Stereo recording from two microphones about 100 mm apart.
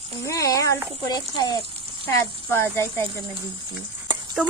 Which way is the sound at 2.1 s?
25° left (ahead or behind).